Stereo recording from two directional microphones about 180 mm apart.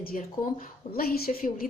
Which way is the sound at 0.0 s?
50° left (ahead or behind).